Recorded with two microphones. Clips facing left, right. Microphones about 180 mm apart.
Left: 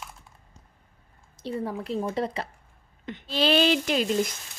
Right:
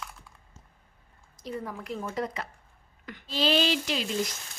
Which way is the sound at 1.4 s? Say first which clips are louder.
Left 5 dB; 30° left (ahead or behind).